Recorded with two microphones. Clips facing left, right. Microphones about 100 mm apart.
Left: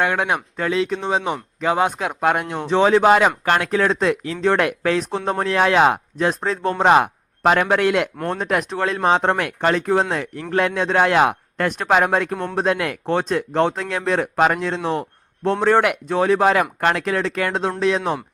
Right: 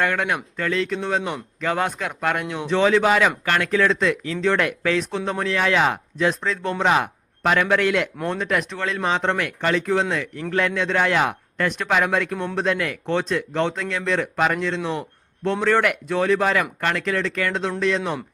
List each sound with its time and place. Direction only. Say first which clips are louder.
0.0 s speech: left 2 dB; 25° left (ahead or behind)
1.0 s speech: left 3 dB; 5° left (ahead or behind)
1.6 s speech: left 4 dB; 20° left (ahead or behind)
2.0 s speech: left 4 dB; 45° left (ahead or behind)
2.6 s speech: left 4 dB; 30° left (ahead or behind)
15.8 s speech: left 2 dB; 40° left (ahead or behind)